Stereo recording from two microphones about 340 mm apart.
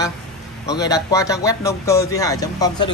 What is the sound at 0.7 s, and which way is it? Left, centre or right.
A man's voice, centre.